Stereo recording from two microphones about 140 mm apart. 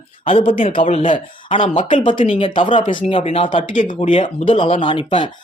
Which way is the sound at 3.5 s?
75° left (ahead or behind).